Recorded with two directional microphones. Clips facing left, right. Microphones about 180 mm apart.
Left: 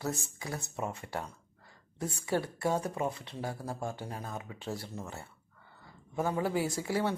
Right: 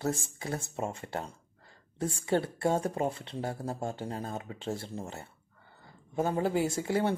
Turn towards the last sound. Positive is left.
turn(degrees=-25)  # may be behind; listen again after turning